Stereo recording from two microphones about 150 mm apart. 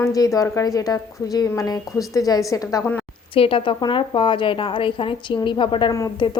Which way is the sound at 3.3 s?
35° left (ahead or behind).